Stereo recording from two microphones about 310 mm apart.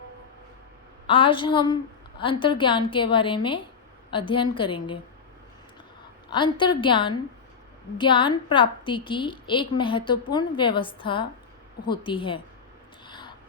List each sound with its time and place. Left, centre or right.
1.0 s a woman's voice: centre
6.3 s a woman's voice: centre
13.1 s a sound: centre